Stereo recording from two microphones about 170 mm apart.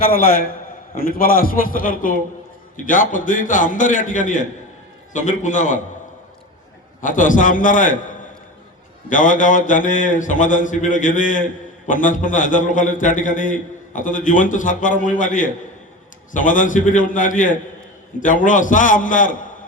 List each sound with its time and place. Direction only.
0.0 s a man's voice: 60° left (ahead or behind)
7.0 s a man's voice: 50° left (ahead or behind)